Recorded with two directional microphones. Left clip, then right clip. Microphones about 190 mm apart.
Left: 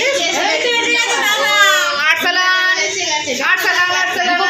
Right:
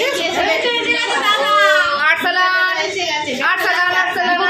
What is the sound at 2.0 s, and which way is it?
Child singing, 5° left (ahead or behind).